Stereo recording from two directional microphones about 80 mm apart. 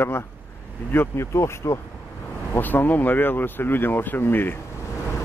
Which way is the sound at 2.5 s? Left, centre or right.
Left.